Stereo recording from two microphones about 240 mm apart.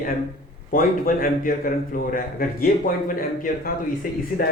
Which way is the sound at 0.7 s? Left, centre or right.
Left.